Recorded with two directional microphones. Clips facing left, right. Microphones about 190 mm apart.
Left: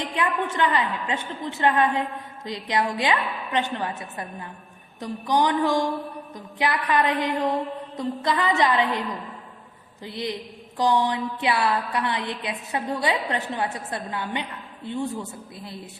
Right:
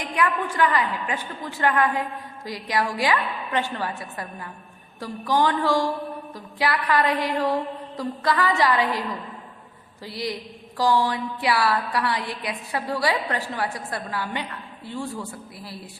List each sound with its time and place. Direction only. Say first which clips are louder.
0.0 s a woman's voice: right 1 dB; 25° left (ahead or behind)